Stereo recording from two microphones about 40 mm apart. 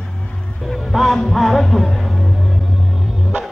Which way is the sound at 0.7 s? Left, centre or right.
Centre.